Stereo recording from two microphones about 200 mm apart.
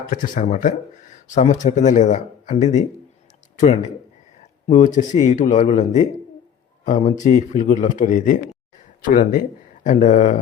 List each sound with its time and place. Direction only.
0.1 s speech: 40° left (ahead or behind)